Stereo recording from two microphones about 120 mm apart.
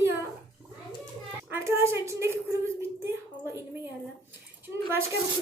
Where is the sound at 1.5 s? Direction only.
20° right (ahead or behind).